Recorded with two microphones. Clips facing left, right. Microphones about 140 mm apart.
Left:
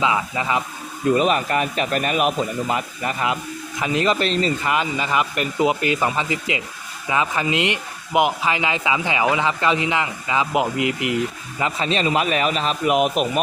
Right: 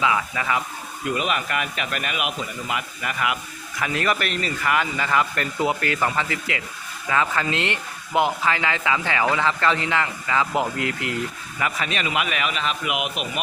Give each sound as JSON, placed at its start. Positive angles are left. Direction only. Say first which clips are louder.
{"t": 0.0, "sound": "speech", "louder": "left 2 dB", "side_deg": 25}
{"t": 1.1, "sound": "speech", "louder": "left 6 dB", "side_deg": 35}
{"t": 11.6, "sound": "speech", "louder": "left 5 dB", "side_deg": 30}